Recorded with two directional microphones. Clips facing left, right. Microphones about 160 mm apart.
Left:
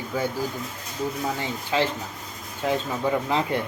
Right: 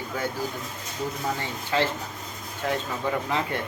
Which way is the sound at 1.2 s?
15° left (ahead or behind).